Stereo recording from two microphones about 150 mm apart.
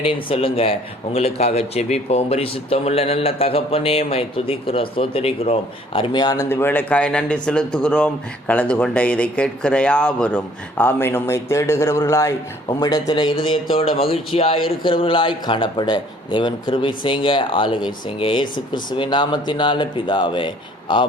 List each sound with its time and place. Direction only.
0.0 s a man's voice: 35° left (ahead or behind)